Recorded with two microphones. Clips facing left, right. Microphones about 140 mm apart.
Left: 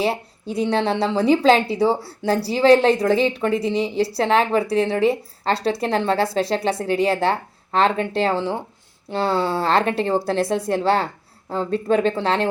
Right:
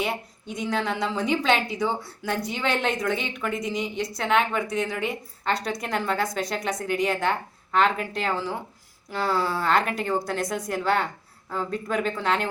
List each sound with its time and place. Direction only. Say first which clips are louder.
0.0 s a woman's voice: left 6 dB; 30° left (ahead or behind)